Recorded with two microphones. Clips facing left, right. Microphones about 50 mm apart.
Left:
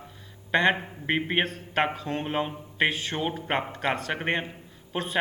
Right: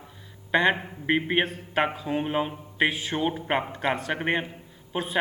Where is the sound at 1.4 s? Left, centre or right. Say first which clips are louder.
Right 1 dB; centre.